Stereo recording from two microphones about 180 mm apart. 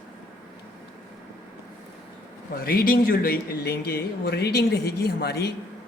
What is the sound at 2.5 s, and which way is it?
Speech, 55° left (ahead or behind).